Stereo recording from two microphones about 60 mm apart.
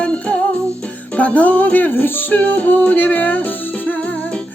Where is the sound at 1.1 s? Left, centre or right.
Left.